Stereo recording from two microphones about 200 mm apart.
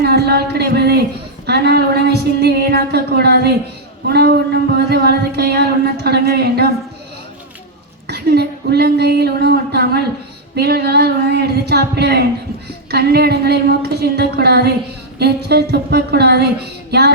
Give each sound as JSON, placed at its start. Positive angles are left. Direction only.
{"t": 0.0, "sound": "a sound", "side_deg": -55}
{"t": 1.5, "sound": "a woman's voice", "side_deg": -55}
{"t": 8.0, "sound": "a woman's voice", "side_deg": -55}